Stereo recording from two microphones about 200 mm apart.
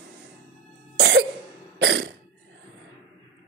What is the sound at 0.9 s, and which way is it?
Cough, 65° right (ahead or behind).